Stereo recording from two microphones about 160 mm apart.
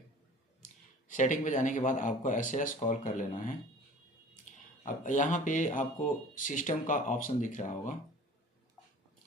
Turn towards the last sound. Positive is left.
turn(degrees=55)  # may be behind; listen again after turning